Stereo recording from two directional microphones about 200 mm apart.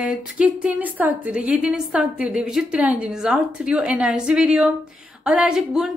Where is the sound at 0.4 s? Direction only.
5° right (ahead or behind).